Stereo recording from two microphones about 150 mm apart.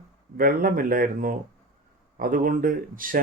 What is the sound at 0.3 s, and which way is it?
Speech, 70° right (ahead or behind).